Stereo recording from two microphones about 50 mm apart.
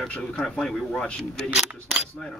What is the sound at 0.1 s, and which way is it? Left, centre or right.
Speech, left.